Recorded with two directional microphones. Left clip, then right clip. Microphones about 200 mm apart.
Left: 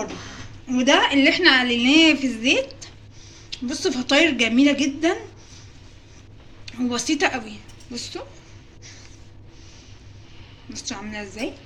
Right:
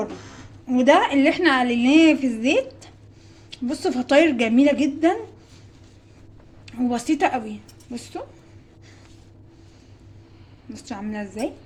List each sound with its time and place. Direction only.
0.7 s a woman's voice: 55° right (ahead or behind)
6.7 s a woman's voice: 50° right (ahead or behind)
10.7 s a woman's voice: 45° right (ahead or behind)